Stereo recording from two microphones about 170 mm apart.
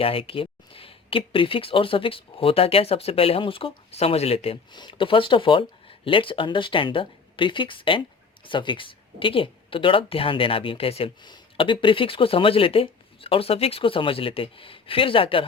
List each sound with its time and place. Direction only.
0.0 s speech: 35° left (ahead or behind)